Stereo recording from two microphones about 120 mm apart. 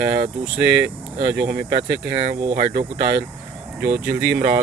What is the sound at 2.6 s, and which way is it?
Speech, 55° right (ahead or behind).